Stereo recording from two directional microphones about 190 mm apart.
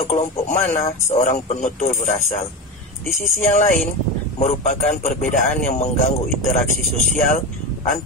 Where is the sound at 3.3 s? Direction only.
40° left (ahead or behind).